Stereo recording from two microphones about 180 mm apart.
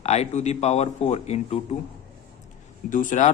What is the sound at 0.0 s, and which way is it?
Speech, 35° left (ahead or behind).